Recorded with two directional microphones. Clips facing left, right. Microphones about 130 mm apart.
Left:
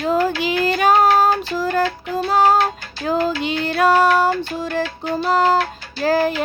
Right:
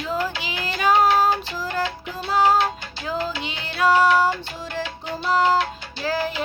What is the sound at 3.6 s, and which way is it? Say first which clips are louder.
Music: left 3 dB; 50° left (ahead or behind).